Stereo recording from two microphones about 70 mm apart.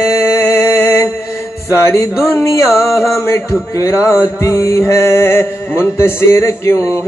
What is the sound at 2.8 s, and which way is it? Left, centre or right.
Music, left.